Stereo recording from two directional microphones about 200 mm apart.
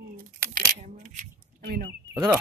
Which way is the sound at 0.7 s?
35° right (ahead or behind).